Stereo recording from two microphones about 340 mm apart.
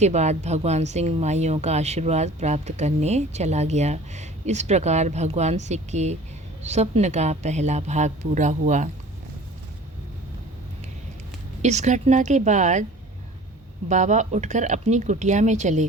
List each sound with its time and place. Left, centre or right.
0.0 s speech: centre
11.6 s speech: centre
13.8 s speech: right